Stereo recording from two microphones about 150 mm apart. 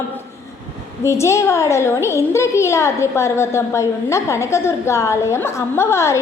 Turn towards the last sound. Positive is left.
turn(degrees=20)  # may be behind; listen again after turning